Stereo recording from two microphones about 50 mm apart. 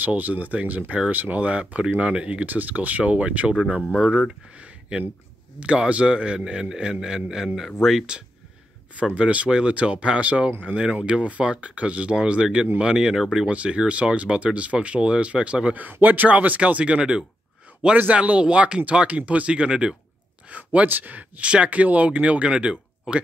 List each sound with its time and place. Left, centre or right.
0.0 s speech: right
4.6 s a sound: right
5.6 s a man's voice: right; by 8.2 s centre
9.1 s a man's voice: right; by 13.5 s centre
13.5 s speech: right
15.7 s speech: right; by 20.0 s centre
20.4 s speech: right